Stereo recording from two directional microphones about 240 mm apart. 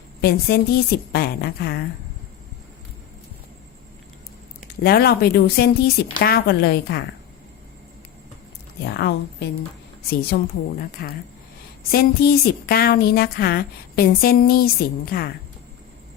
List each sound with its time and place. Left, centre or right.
0.2 s a woman's voice: left
4.8 s a woman's voice: left
8.9 s a woman's voice: left